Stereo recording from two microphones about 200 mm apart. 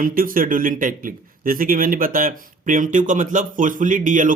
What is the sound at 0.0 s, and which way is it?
Speech, 45° right (ahead or behind).